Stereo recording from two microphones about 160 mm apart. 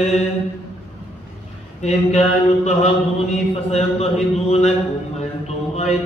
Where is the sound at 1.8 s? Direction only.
45° left (ahead or behind).